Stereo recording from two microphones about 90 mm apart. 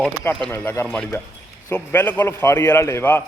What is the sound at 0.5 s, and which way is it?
A man's voice, 30° left (ahead or behind).